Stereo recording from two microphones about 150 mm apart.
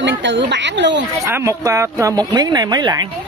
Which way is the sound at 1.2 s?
20° right (ahead or behind).